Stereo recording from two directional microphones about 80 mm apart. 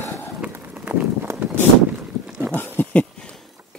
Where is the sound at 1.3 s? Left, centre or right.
Right.